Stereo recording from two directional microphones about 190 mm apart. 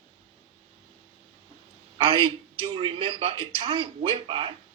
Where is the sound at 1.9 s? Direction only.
25° right (ahead or behind).